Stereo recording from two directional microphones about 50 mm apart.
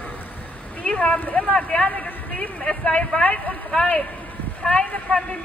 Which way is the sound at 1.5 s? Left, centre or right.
Left.